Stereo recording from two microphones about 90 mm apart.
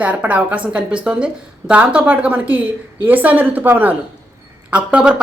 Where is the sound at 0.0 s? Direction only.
15° right (ahead or behind).